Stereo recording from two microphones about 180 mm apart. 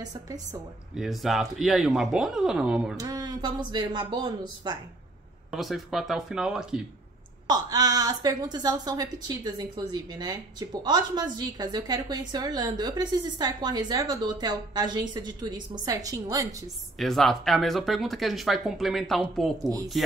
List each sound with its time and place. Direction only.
0.9 s speech: centre (ahead or behind)
3.0 s a woman's voice: 20° right (ahead or behind)
5.5 s speech: centre (ahead or behind)
7.4 s a woman's voice: 20° right (ahead or behind)
17.0 s speech: centre (ahead or behind)